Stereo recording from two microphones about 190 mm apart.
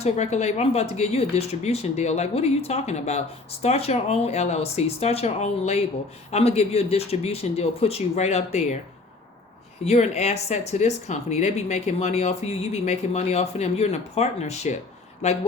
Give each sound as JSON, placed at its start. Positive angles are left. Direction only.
{"t": 0.0, "sound": "speech", "side_deg": 35}
{"t": 9.8, "sound": "speech", "side_deg": 35}